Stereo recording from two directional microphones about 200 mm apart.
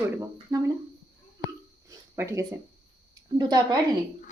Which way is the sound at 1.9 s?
15° right (ahead or behind).